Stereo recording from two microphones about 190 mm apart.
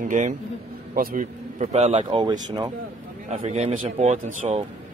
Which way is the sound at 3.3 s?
35° right (ahead or behind).